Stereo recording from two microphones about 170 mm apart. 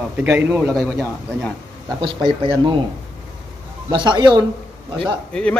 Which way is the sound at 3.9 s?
25° right (ahead or behind).